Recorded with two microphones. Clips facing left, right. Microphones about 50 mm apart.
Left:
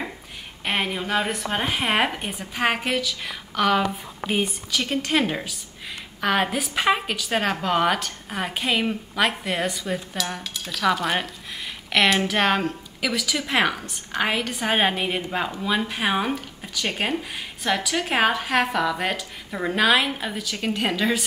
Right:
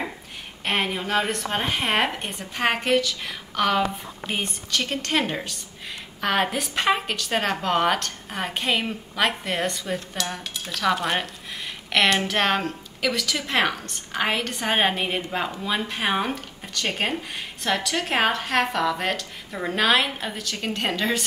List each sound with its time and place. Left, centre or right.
0.7 s a woman's voice: centre